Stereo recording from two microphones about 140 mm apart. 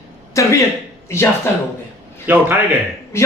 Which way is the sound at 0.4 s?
20° left (ahead or behind).